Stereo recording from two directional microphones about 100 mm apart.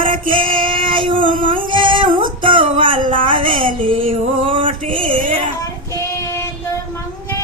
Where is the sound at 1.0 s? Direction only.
55° right (ahead or behind).